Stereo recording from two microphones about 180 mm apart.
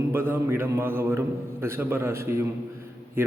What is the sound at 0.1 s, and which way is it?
A man's voice, 10° right (ahead or behind).